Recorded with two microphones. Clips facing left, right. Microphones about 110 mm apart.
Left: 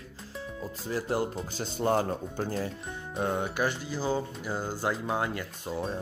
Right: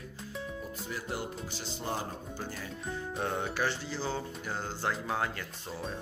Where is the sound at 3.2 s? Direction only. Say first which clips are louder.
Left 4 dB; 15° left (ahead or behind).